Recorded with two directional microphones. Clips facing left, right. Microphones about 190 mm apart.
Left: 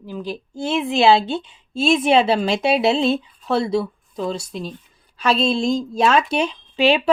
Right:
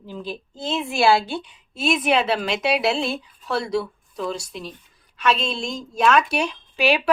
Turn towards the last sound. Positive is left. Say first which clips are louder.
# left 3 dB
turn(degrees=25)  # may be behind; listen again after turning